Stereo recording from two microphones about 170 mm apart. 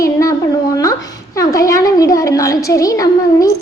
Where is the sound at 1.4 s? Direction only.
20° left (ahead or behind).